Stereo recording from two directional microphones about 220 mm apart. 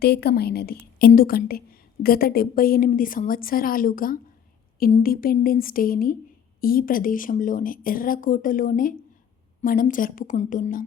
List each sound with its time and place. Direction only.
0.0 s a woman's voice: 45° left (ahead or behind)